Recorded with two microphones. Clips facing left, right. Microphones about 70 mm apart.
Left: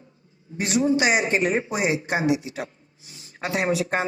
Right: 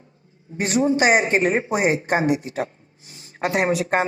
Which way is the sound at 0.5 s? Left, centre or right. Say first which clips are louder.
Right 2 dB; right.